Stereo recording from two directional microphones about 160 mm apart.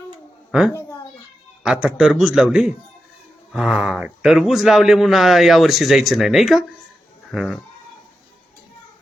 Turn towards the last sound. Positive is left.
turn(degrees=0)  # may be behind; listen again after turning